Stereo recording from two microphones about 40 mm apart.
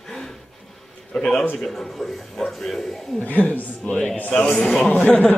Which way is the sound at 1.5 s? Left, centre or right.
Centre.